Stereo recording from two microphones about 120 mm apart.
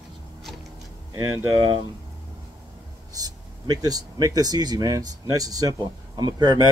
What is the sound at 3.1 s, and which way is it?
Speech, 30° right (ahead or behind).